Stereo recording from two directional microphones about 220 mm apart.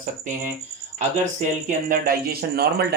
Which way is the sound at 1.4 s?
35° right (ahead or behind).